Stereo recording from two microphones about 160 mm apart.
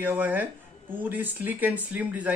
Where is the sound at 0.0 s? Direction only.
10° right (ahead or behind).